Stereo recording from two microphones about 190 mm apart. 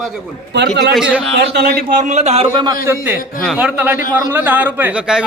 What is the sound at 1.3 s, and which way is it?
A man's voice, 60° right (ahead or behind).